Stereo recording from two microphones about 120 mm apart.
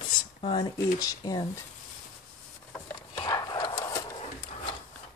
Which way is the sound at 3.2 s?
35° left (ahead or behind).